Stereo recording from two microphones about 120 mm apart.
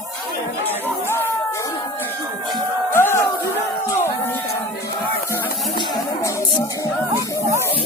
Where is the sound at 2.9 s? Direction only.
20° left (ahead or behind).